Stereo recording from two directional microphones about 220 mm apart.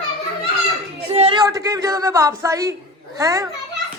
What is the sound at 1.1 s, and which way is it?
A woman's voice, 25° right (ahead or behind).